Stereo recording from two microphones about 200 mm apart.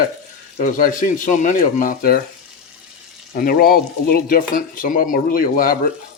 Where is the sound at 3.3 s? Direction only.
50° left (ahead or behind).